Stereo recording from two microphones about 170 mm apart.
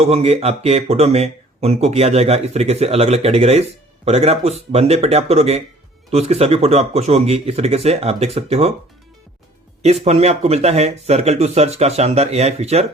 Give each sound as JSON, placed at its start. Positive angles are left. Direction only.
{"t": 0.0, "sound": "speech", "side_deg": -40}
{"t": 9.8, "sound": "speech", "side_deg": -40}